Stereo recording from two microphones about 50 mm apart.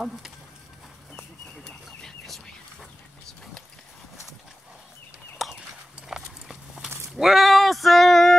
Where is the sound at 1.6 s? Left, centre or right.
Centre.